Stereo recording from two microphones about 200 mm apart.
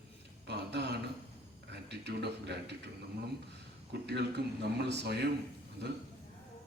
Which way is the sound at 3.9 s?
55° right (ahead or behind).